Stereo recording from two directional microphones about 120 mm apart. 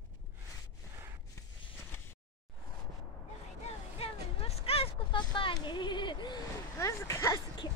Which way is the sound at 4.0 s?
55° left (ahead or behind).